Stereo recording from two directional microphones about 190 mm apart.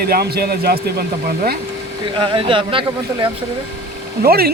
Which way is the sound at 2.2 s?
25° right (ahead or behind).